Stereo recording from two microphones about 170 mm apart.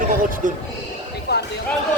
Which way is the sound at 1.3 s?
75° left (ahead or behind).